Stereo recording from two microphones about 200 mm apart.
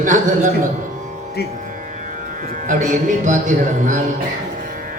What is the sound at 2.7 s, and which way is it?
A man's voice, 40° right (ahead or behind).